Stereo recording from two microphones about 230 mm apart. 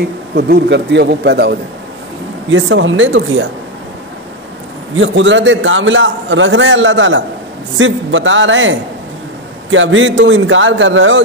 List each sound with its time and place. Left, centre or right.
0.4 s a man's voice: right
4.9 s a man's voice: right